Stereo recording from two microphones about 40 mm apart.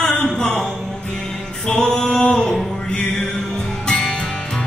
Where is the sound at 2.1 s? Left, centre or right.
Left.